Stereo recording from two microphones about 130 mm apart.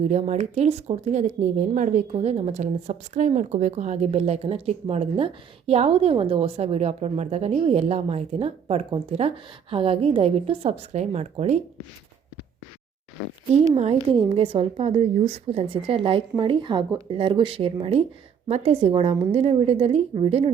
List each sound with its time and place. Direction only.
0.1 s speech: 60° right (ahead or behind)
13.7 s speech: 55° right (ahead or behind)
14.2 s speech: 45° right (ahead or behind)